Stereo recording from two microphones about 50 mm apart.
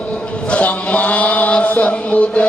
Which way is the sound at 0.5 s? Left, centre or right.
Left.